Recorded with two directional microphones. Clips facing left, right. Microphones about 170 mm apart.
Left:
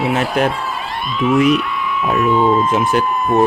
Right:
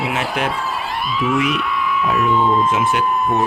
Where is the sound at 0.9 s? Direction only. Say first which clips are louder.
Left 4 dB; 5° right (ahead or behind).